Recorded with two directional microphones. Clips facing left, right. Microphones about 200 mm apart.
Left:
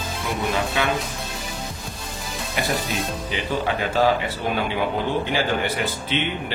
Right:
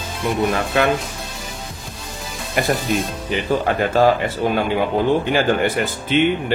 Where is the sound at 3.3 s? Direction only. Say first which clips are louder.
Right 6 dB; 45° right (ahead or behind).